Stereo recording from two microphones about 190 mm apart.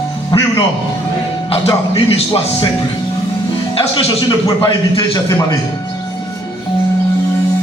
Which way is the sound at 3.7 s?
30° left (ahead or behind).